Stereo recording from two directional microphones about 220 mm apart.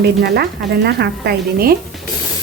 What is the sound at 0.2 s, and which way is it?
Speech, 50° right (ahead or behind).